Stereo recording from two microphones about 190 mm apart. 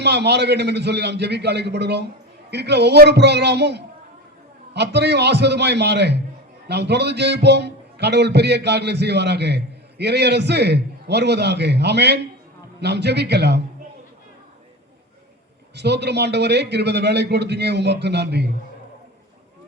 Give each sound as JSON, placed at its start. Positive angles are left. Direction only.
{"t": 0.0, "sound": "a man's voice", "side_deg": -60}
{"t": 15.7, "sound": "a man's voice", "side_deg": -60}